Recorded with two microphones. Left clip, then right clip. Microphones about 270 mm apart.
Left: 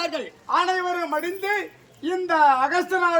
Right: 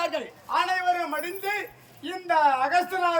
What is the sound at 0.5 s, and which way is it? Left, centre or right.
A man's voice, centre.